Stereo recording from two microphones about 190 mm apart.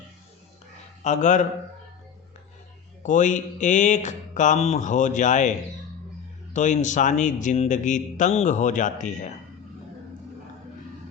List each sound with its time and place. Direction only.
1.0 s speech: 40° left (ahead or behind)
3.0 s speech: 40° left (ahead or behind)